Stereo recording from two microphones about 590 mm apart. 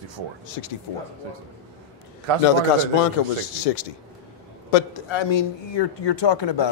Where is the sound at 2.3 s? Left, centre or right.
Right.